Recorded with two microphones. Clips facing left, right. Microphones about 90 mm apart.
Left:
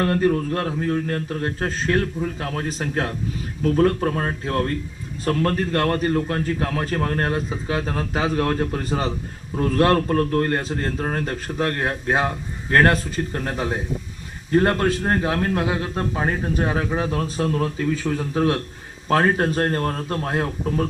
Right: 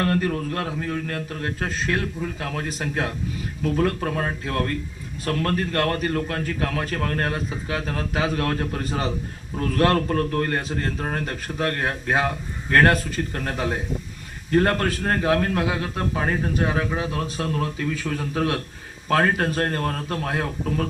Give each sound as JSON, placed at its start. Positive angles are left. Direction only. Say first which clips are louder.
{"t": 0.0, "sound": "a man's voice", "louder": "left 3 dB", "side_deg": 25}